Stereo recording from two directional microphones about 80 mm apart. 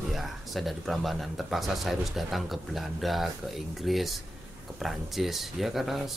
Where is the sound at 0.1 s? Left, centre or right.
Centre.